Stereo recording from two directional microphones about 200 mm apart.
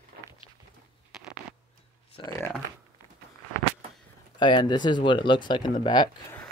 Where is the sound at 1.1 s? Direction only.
Centre (ahead or behind).